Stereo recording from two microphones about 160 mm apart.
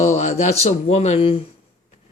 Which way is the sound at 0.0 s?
45° left (ahead or behind).